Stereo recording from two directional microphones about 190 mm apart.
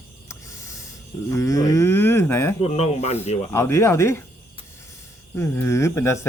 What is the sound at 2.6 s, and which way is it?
Speech, 35° left (ahead or behind).